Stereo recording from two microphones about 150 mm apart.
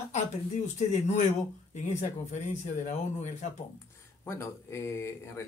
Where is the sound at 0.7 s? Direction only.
50° left (ahead or behind).